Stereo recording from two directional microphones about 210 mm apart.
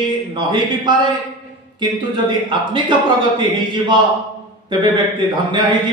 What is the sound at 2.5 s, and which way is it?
A man's voice, 25° right (ahead or behind).